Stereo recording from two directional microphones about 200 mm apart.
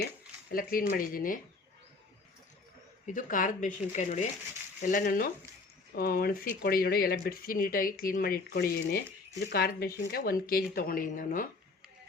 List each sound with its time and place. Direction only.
0.5 s speech: 45° left (ahead or behind)
3.1 s speech: 40° left (ahead or behind)